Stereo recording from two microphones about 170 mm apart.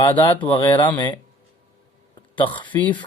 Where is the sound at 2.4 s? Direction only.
30° left (ahead or behind).